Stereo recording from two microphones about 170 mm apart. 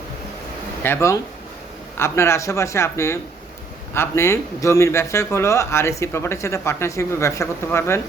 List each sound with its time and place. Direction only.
0.8 s speech: 15° left (ahead or behind)